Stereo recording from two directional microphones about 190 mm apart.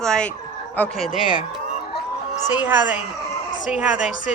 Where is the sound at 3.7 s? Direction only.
5° right (ahead or behind).